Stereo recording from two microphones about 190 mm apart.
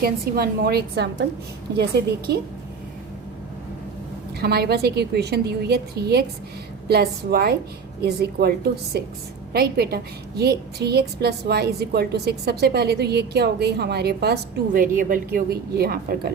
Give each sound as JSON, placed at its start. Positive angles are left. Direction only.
{"t": 0.0, "sound": "a woman's voice", "side_deg": -55}
{"t": 4.4, "sound": "a woman's voice", "side_deg": -55}